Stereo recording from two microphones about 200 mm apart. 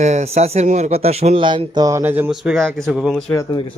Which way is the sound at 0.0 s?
35° right (ahead or behind).